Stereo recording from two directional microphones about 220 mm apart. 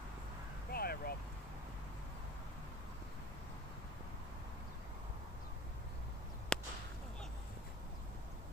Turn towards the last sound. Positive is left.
turn(degrees=5)  # may be behind; listen again after turning